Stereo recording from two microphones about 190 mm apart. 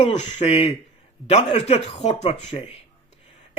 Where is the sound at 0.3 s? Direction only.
35° left (ahead or behind).